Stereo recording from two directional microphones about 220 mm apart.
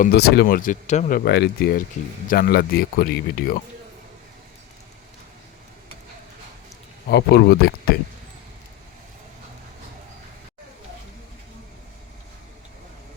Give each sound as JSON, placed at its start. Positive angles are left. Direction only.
{"t": 0.0, "sound": "speech", "side_deg": 45}
{"t": 7.1, "sound": "speech", "side_deg": 50}